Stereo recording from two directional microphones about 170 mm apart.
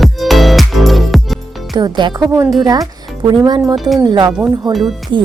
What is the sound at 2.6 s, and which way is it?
Speech, 20° right (ahead or behind).